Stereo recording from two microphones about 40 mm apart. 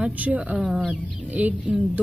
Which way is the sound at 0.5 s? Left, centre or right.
Right.